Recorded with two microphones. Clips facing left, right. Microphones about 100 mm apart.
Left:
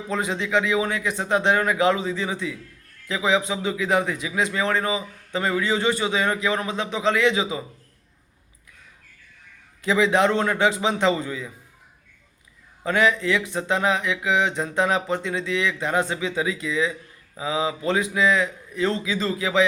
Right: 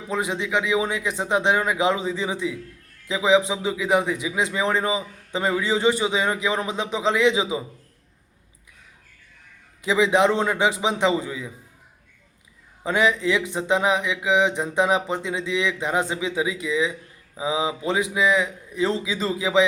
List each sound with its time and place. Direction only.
0.1 s mantra: 15° right (ahead or behind)
3.1 s a man's voice: 20° right (ahead or behind)
9.8 s mantra: 15° right (ahead or behind)
12.8 s mantra: 15° right (ahead or behind)